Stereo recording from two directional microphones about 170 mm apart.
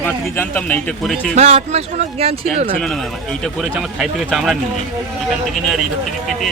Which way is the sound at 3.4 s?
Centre (ahead or behind).